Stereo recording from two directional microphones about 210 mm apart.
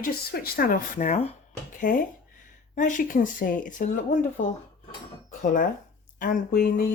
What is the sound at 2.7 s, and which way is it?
Speech, 35° left (ahead or behind).